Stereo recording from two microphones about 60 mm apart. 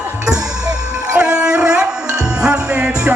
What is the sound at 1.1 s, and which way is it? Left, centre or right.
Music, centre.